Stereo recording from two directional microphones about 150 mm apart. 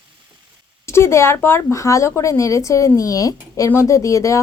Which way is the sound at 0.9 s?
20° left (ahead or behind).